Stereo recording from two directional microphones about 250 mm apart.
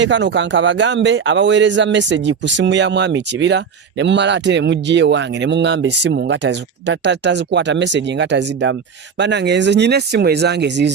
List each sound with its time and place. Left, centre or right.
0.0 s speech: right